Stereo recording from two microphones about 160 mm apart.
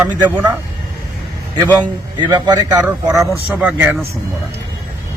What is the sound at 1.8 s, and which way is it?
Speech, 25° right (ahead or behind).